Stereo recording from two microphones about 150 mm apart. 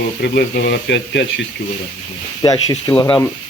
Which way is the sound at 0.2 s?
90° left.